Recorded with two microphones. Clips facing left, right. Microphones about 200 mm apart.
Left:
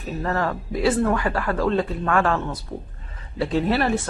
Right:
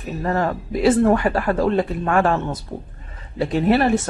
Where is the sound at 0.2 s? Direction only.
20° right (ahead or behind).